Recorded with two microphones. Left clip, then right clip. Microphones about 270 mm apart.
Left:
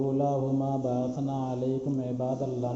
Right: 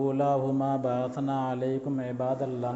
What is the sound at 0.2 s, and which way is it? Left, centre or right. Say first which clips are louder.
Mantra: right 2 dB; right.